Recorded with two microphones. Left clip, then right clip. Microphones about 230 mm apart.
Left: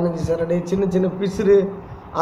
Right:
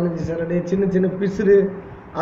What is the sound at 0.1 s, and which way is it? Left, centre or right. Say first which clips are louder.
A man's voice: left 3 dB; centre.